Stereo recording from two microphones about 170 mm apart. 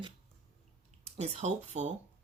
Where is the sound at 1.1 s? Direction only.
40° right (ahead or behind).